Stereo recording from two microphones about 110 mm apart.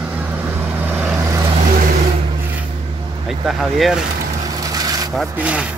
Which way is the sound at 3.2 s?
5° right (ahead or behind).